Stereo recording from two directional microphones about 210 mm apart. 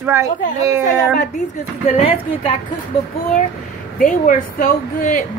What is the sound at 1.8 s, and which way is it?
Speech, 25° left (ahead or behind).